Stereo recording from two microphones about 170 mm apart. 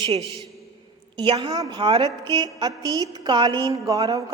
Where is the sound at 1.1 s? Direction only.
30° right (ahead or behind).